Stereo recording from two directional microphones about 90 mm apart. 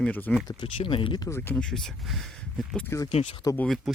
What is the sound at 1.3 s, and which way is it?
Speech, 25° left (ahead or behind).